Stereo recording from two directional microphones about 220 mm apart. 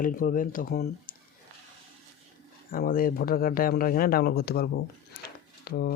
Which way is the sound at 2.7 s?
40° left (ahead or behind).